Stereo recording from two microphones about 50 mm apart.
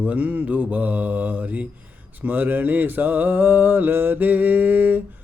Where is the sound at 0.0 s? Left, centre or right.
Right.